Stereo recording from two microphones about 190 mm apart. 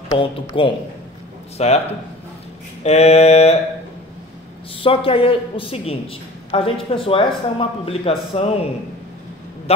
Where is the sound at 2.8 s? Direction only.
35° left (ahead or behind).